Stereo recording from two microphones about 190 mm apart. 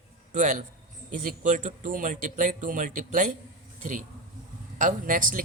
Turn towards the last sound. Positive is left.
turn(degrees=-45)  # may be behind; listen again after turning